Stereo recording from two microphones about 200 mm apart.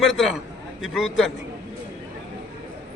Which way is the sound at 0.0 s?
Centre (ahead or behind).